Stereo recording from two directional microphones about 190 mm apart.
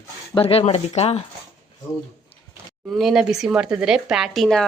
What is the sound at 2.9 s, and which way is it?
Speech, centre (ahead or behind).